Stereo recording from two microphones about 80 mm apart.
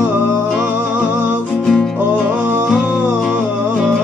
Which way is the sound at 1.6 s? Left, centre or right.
Centre.